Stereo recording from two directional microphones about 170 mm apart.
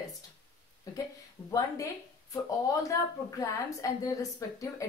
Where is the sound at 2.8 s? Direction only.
20° left (ahead or behind).